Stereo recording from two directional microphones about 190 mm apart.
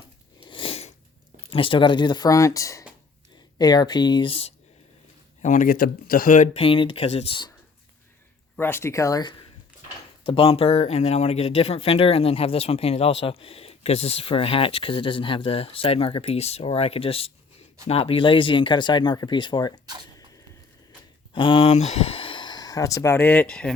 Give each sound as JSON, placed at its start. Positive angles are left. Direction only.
{"t": 0.4, "sound": "a sound", "side_deg": 25}
{"t": 1.5, "sound": "speech", "side_deg": 30}
{"t": 5.4, "sound": "speech", "side_deg": 40}
{"t": 6.6, "sound": "speech", "side_deg": 25}
{"t": 8.5, "sound": "speech", "side_deg": 10}
{"t": 21.3, "sound": "speech", "side_deg": 25}